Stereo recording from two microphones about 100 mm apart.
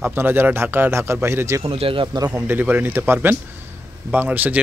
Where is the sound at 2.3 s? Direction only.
20° right (ahead or behind).